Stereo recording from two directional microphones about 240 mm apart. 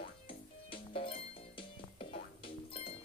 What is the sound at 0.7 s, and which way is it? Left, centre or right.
Music, left.